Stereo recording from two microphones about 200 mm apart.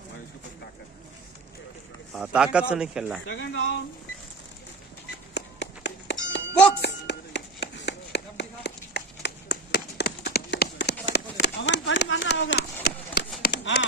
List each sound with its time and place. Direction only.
2.1 s a man's voice: 5° right (ahead or behind)
3.3 s speech: 65° left (ahead or behind)
5.3 s a sound: 60° left (ahead or behind)